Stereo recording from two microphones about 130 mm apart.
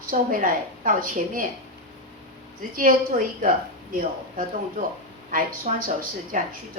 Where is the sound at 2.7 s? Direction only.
90° right.